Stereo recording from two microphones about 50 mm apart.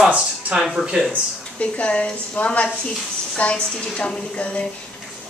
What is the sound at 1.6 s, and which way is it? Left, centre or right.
A woman's voice, left.